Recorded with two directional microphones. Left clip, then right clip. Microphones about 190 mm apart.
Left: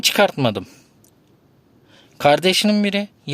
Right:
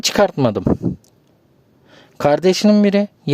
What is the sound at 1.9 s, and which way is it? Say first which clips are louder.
Speech: even; 50° right (ahead or behind).